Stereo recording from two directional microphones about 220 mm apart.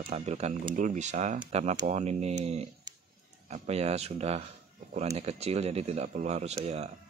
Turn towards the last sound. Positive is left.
turn(degrees=-30)  # may be behind; listen again after turning